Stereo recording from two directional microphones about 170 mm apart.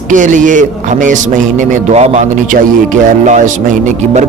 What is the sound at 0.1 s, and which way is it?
A man's voice, 50° right (ahead or behind).